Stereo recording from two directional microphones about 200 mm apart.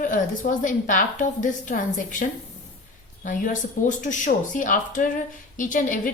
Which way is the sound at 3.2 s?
40° left (ahead or behind).